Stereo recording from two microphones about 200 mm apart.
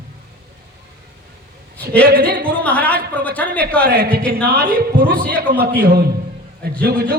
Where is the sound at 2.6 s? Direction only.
5° left (ahead or behind).